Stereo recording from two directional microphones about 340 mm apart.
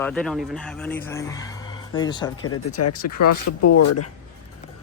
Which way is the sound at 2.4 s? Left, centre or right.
Left.